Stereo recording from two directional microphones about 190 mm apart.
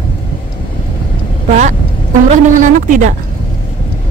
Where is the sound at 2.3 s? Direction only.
40° right (ahead or behind).